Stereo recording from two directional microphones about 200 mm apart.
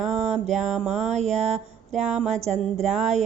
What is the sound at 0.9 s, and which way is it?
Speech, 35° right (ahead or behind).